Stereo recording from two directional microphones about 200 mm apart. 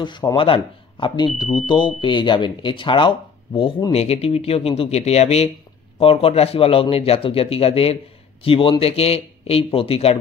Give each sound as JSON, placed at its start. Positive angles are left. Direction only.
{"t": 0.0, "sound": "speech", "side_deg": 20}